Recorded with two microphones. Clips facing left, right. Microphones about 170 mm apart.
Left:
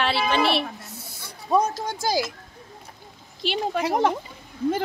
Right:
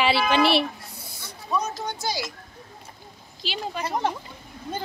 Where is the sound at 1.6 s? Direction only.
90° left.